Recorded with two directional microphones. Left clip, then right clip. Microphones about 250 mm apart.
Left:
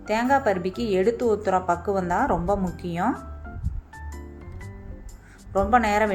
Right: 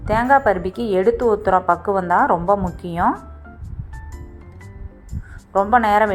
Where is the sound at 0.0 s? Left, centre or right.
Centre.